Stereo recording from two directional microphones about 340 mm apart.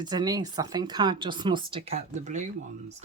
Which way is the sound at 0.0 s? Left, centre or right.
Centre.